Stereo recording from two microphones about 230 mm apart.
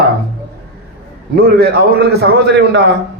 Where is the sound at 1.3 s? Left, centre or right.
Right.